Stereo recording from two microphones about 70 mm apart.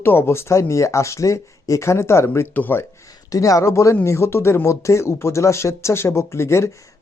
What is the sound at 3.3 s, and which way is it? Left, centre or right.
Speech, left.